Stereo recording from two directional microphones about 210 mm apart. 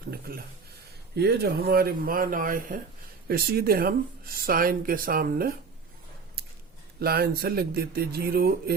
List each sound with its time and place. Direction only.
0.1 s a sound: 45° right (ahead or behind)
1.1 s speech: 50° right (ahead or behind)
7.0 s speech: 45° right (ahead or behind)